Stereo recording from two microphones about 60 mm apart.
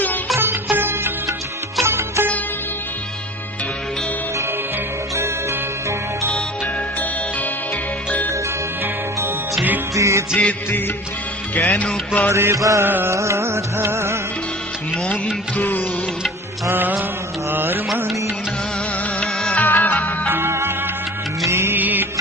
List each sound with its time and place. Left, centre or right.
0.3 s music: right
5.1 s music: right
9.9 s music: right
10.7 s music: left
12.3 s music: right
12.5 s mantra: right
12.8 s music: right
13.1 s music: right
15.5 s music: left
17.5 s music: right
19.2 s music: centre
19.5 s music: left
20.3 s music: right
21.8 s music: right